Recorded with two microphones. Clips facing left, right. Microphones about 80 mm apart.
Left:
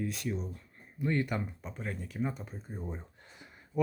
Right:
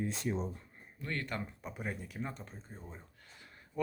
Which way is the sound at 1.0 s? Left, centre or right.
Centre.